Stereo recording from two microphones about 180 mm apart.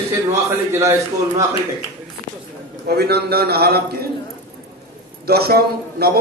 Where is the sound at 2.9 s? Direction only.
65° right (ahead or behind).